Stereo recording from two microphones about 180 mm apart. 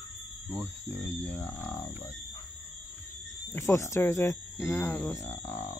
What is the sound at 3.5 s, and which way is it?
Speech, 15° left (ahead or behind).